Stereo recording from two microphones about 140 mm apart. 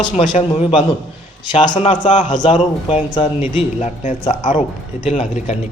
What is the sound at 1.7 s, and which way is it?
Speech, 60° left (ahead or behind).